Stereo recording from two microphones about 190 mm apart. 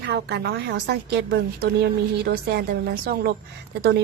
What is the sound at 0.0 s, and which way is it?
A woman's voice, 60° right (ahead or behind).